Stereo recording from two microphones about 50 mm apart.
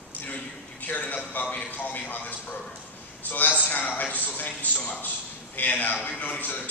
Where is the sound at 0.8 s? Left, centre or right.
Left.